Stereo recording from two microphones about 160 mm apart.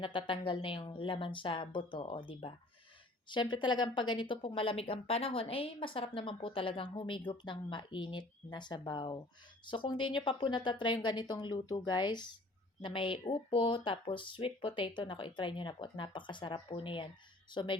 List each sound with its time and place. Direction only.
0.0 s speech: 30° left (ahead or behind)